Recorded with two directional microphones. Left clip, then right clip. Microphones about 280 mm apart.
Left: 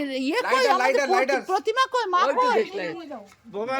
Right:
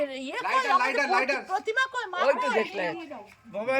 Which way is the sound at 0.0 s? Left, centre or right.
Centre.